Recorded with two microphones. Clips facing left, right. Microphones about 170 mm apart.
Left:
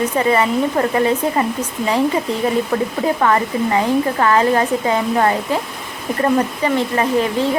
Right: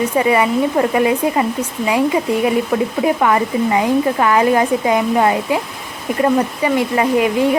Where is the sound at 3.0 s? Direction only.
10° right (ahead or behind).